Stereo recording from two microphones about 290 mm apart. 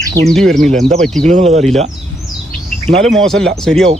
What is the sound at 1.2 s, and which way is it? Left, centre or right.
Speech, right.